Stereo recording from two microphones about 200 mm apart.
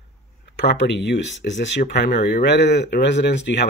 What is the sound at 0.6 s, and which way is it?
Speech, 60° left (ahead or behind).